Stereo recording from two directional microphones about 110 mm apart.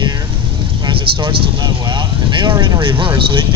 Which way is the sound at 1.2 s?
45° right (ahead or behind).